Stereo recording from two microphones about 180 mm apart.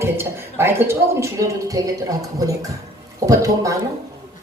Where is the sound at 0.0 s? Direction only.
15° right (ahead or behind).